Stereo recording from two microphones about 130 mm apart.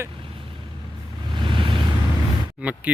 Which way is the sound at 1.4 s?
40° right (ahead or behind).